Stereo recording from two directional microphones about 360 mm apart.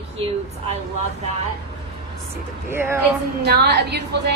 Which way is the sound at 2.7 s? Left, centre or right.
Centre.